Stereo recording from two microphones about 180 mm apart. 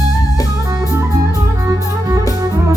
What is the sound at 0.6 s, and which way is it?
Music, 20° right (ahead or behind).